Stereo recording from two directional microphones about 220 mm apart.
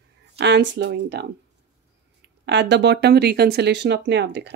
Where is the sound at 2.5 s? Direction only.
55° right (ahead or behind).